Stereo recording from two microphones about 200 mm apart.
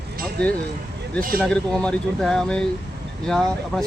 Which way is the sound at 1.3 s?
5° left (ahead or behind).